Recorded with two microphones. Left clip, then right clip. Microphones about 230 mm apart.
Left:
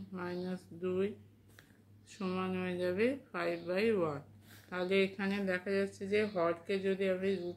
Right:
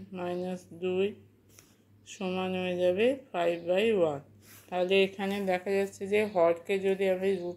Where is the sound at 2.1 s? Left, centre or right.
Centre.